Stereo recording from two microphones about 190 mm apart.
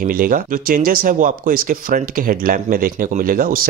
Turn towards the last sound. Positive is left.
turn(degrees=-50)  # may be behind; listen again after turning